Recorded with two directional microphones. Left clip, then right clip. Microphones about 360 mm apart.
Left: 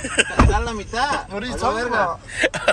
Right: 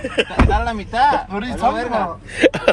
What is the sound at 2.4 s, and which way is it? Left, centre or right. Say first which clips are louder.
Speech: right 6 dB; centre.